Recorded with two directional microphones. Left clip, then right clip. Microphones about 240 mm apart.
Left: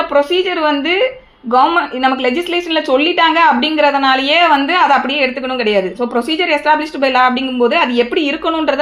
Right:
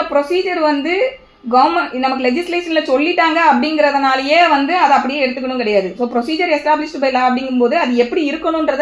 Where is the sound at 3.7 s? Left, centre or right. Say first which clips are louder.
Left 2 dB; left.